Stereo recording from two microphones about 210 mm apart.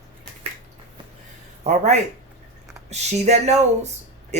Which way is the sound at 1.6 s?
35° right (ahead or behind).